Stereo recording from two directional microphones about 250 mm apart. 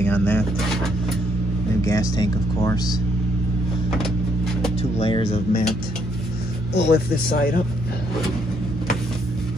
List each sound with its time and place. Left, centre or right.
0.0 s a sound: centre
1.8 s speech: centre
4.9 s speech: left
6.7 s speech: left